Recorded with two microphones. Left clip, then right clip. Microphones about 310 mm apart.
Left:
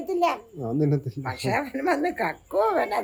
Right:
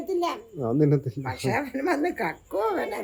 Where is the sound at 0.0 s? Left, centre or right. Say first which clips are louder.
Left 3 dB; centre.